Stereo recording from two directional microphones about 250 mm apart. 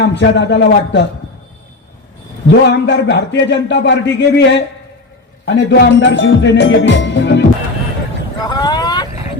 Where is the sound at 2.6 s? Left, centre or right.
Left.